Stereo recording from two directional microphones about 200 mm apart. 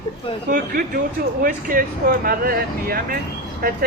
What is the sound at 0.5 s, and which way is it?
Speech, 45° right (ahead or behind).